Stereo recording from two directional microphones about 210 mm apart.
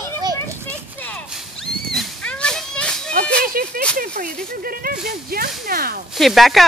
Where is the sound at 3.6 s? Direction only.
45° right (ahead or behind).